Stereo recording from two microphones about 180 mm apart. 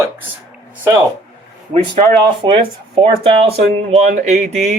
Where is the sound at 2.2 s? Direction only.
30° right (ahead or behind).